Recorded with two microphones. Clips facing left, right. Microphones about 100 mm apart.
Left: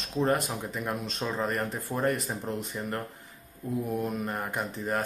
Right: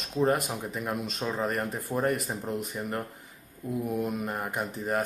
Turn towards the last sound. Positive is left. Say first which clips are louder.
# right 1 dB
turn(degrees=-5)  # may be behind; listen again after turning